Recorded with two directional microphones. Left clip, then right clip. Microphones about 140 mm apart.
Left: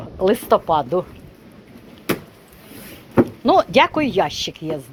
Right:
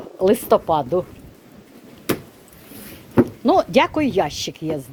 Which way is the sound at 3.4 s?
40° right (ahead or behind).